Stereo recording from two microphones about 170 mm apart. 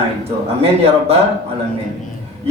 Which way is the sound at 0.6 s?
35° right (ahead or behind).